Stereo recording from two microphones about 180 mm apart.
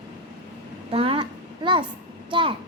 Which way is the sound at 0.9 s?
30° right (ahead or behind).